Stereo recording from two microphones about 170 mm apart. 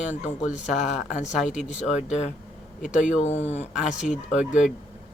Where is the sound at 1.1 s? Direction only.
45° left (ahead or behind).